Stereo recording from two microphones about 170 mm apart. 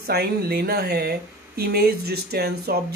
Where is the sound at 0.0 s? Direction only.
65° right (ahead or behind).